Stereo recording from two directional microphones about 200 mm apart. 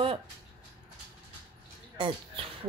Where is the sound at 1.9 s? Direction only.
25° right (ahead or behind).